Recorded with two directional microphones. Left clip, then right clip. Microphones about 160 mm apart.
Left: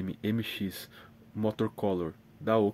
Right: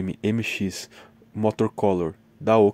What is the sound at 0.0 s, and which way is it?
Speech, 35° right (ahead or behind).